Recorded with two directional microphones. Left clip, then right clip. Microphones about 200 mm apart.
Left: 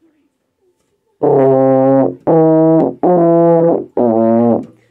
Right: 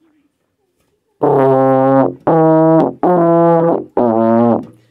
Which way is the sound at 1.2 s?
15° right (ahead or behind).